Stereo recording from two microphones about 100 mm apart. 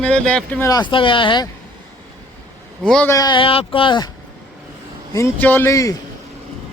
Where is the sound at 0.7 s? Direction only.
50° left (ahead or behind).